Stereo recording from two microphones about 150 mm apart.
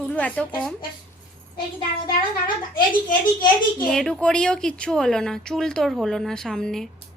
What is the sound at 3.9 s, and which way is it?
A woman's voice, 5° left (ahead or behind).